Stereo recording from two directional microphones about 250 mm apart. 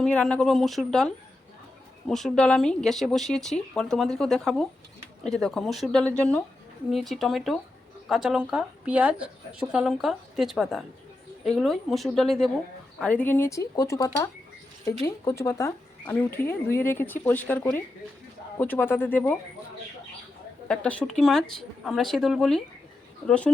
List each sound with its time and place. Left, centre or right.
0.0 s speech: centre
20.7 s speech: centre